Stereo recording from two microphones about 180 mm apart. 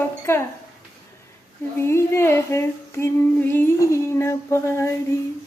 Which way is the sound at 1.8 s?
15° left (ahead or behind).